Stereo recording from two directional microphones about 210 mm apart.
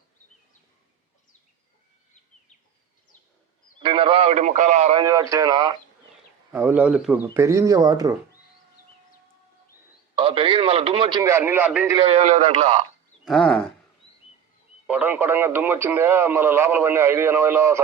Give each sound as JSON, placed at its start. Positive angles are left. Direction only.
{"t": 3.8, "sound": "a man's voice", "side_deg": -25}
{"t": 5.0, "sound": "speech", "side_deg": -15}
{"t": 6.5, "sound": "speech", "side_deg": -10}
{"t": 10.2, "sound": "a man's voice", "side_deg": -25}
{"t": 11.9, "sound": "speech", "side_deg": -30}
{"t": 13.2, "sound": "a sound", "side_deg": 0}
{"t": 14.8, "sound": "speech", "side_deg": -10}